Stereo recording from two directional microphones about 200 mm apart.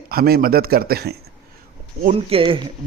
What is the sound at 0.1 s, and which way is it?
A man's voice, 50° right (ahead or behind).